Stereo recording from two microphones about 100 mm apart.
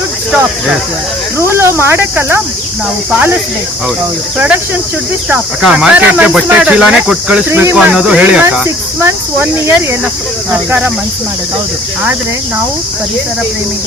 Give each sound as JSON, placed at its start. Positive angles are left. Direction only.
{"t": 1.5, "sound": "speech", "side_deg": -25}
{"t": 4.4, "sound": "speech", "side_deg": -15}
{"t": 8.6, "sound": "speech", "side_deg": -25}